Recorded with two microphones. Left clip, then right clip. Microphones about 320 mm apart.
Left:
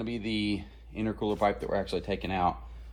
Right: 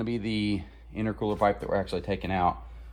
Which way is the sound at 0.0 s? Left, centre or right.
Right.